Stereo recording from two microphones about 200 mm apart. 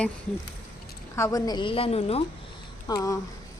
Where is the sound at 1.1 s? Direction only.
15° left (ahead or behind).